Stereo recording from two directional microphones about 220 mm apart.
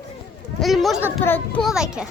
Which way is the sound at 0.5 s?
Centre (ahead or behind).